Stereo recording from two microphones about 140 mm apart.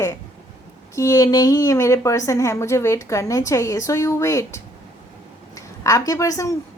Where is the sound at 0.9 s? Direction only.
25° left (ahead or behind).